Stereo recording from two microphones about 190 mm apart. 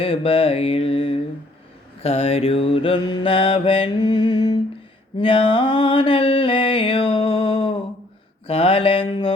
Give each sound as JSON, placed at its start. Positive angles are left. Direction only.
{"t": 0.0, "sound": "mantra", "side_deg": 30}